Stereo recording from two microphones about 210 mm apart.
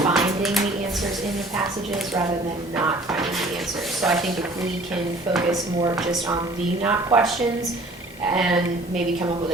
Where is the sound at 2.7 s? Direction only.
5° right (ahead or behind).